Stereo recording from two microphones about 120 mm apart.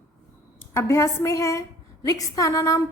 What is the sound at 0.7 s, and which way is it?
A woman's voice, 20° left (ahead or behind).